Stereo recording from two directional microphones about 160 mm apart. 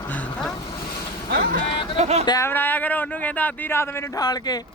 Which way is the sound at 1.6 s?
35° left (ahead or behind).